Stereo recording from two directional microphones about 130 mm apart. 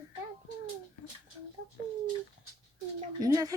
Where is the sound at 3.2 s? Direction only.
25° right (ahead or behind).